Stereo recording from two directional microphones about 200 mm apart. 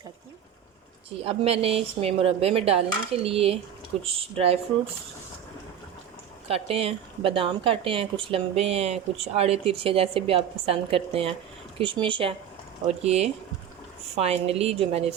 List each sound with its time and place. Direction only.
1.2 s speech: 30° right (ahead or behind)
6.5 s a woman's voice: 30° right (ahead or behind)